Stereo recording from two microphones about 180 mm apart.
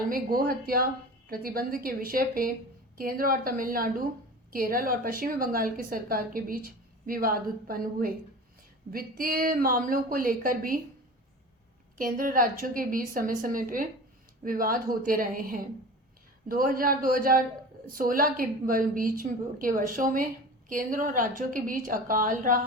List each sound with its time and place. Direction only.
0.1 s a woman's voice: 55° right (ahead or behind)
11.9 s a woman's voice: 50° right (ahead or behind)